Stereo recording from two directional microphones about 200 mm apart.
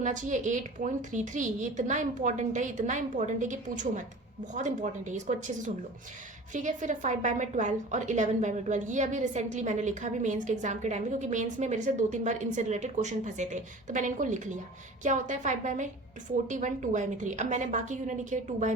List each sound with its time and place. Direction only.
0.0 s a woman's voice: 40° right (ahead or behind)